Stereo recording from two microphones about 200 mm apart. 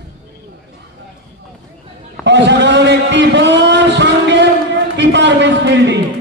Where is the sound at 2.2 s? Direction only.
60° right (ahead or behind).